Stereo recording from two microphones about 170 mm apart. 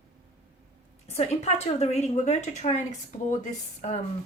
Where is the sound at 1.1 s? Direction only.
40° left (ahead or behind).